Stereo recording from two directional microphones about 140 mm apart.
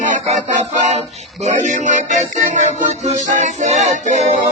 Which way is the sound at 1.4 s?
60° right (ahead or behind).